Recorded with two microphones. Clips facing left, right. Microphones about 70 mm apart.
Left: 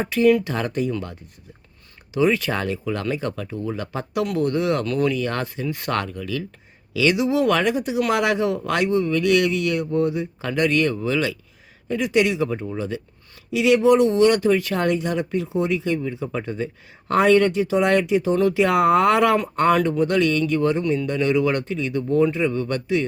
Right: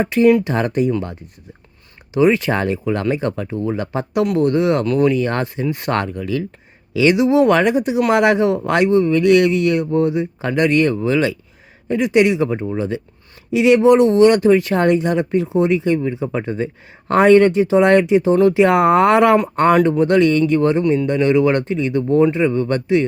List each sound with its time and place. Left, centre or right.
0.1 s speech: right
2.1 s speech: right